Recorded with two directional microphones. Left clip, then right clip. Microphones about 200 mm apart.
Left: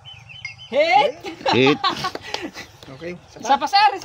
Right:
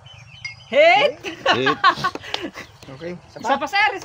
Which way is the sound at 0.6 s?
35° left (ahead or behind).